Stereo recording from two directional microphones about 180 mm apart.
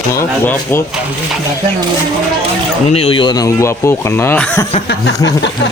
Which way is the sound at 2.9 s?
35° left (ahead or behind).